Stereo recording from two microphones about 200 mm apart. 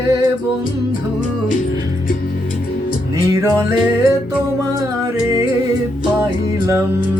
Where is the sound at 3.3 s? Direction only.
15° right (ahead or behind).